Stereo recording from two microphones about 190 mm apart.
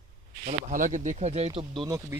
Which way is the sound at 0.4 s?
45° right (ahead or behind).